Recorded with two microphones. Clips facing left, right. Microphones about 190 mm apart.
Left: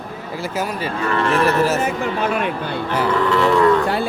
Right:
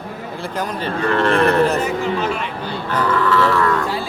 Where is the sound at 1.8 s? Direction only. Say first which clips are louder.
Right 1 dB; 55° left (ahead or behind).